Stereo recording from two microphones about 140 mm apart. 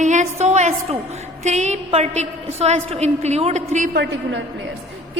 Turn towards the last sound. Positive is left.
turn(degrees=-55)  # may be behind; listen again after turning